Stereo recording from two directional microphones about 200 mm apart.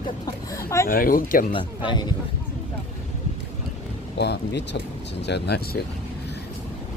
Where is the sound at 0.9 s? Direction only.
45° left (ahead or behind).